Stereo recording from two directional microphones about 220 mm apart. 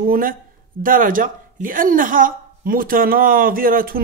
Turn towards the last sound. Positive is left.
turn(degrees=-40)  # may be behind; listen again after turning